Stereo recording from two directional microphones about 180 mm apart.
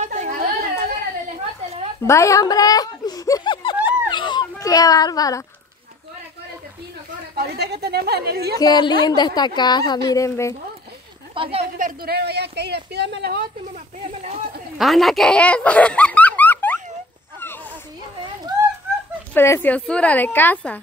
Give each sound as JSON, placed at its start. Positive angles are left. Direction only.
{"t": 0.0, "sound": "chatter", "side_deg": -40}
{"t": 2.0, "sound": "speech", "side_deg": 15}
{"t": 3.8, "sound": "a sound", "side_deg": 25}
{"t": 7.3, "sound": "speech", "side_deg": -65}
{"t": 8.5, "sound": "a woman's voice", "side_deg": 25}
{"t": 11.3, "sound": "a woman's voice", "side_deg": -30}
{"t": 11.8, "sound": "speech", "side_deg": -60}
{"t": 14.0, "sound": "a sound", "side_deg": -35}
{"t": 14.8, "sound": "speech", "side_deg": 0}
{"t": 19.3, "sound": "a woman's voice", "side_deg": 10}